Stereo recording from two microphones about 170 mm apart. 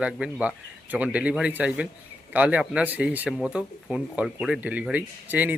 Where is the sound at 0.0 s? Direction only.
5° right (ahead or behind).